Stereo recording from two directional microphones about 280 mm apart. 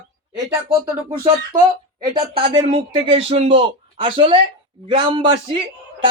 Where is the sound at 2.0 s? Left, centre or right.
Centre.